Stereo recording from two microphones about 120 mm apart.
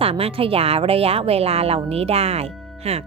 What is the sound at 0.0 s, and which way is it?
A woman's voice, 55° right (ahead or behind).